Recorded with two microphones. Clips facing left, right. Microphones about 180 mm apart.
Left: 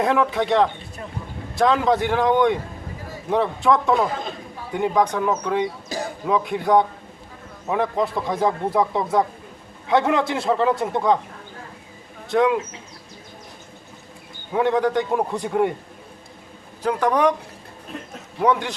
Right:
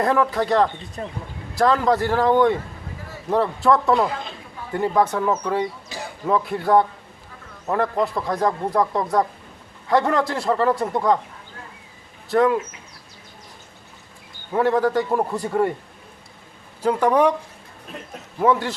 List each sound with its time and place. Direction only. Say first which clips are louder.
0.0 s a man's voice: even; centre (ahead or behind)
1.0 s speech: right 5 dB; 30° right (ahead or behind)
1.5 s a man's voice: even; centre (ahead or behind)
5.9 s a sound: left 6 dB; 40° left (ahead or behind)
6.2 s a man's voice: right 1 dB; centre (ahead or behind)
12.3 s a man's voice: right 1 dB; centre (ahead or behind)
14.5 s a man's voice: right 1 dB; centre (ahead or behind)
16.8 s speech: right 2 dB; 10° right (ahead or behind)
18.3 s a man's voice: right 1 dB; 5° right (ahead or behind)